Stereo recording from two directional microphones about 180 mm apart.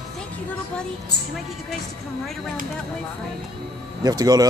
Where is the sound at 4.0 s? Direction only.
20° right (ahead or behind).